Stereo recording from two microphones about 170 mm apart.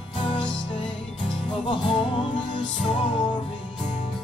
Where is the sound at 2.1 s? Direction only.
30° left (ahead or behind).